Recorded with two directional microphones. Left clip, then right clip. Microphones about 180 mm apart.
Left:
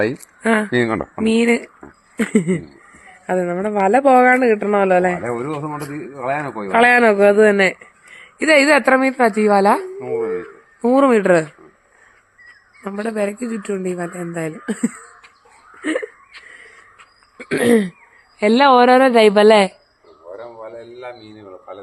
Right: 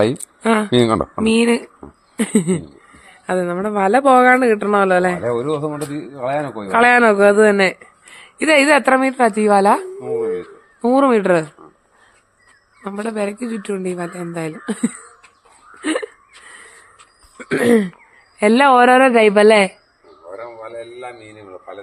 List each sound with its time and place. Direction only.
0.4 s speech: 5° right (ahead or behind)
0.7 s speech: 55° right (ahead or behind)
1.2 s a man's voice: 5° right (ahead or behind)
2.1 s a sound: centre (ahead or behind)
3.0 s a man's voice: centre (ahead or behind)
5.1 s speech: 65° right (ahead or behind)
6.7 s a man's voice: 10° right (ahead or behind)
12.8 s a man's voice: centre (ahead or behind)
15.8 s whimper: 10° right (ahead or behind)
17.3 s throat clearing: 10° right (ahead or behind)
18.3 s a woman's voice: 15° right (ahead or behind)
20.3 s a sound: 55° right (ahead or behind)